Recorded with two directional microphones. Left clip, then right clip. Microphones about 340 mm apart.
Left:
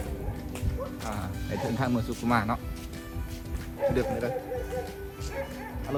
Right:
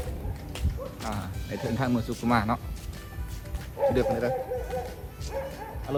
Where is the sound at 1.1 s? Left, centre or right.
Centre.